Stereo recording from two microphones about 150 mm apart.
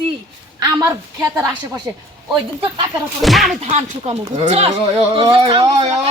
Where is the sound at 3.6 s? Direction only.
45° right (ahead or behind).